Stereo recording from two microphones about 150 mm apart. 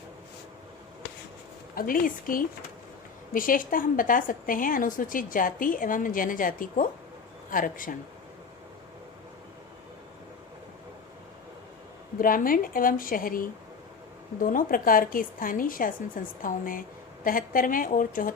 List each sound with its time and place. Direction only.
1.7 s a woman's voice: 70° left (ahead or behind)
12.2 s a woman's voice: 70° left (ahead or behind)